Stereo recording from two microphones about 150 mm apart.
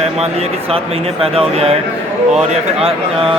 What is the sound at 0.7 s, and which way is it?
Speech, 40° right (ahead or behind).